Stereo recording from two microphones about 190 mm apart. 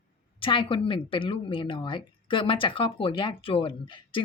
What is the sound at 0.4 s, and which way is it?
A woman's voice, 25° left (ahead or behind).